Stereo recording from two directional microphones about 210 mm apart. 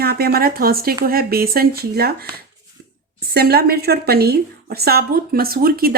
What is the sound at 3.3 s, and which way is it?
A woman's voice, 50° right (ahead or behind).